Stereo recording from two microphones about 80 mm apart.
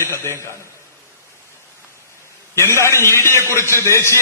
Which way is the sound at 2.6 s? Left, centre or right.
Left.